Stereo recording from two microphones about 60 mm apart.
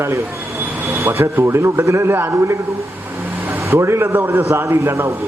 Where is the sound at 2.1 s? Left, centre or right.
Right.